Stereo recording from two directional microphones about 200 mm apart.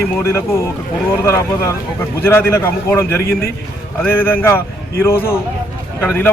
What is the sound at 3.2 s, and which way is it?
Speech, 50° left (ahead or behind).